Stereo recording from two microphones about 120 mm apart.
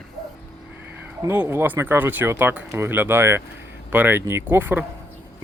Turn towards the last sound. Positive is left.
turn(degrees=-15)  # may be behind; listen again after turning